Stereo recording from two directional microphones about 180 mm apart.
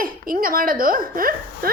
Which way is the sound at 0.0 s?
50° right (ahead or behind).